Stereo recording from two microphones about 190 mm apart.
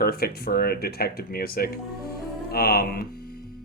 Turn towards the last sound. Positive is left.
turn(degrees=50)  # may be behind; listen again after turning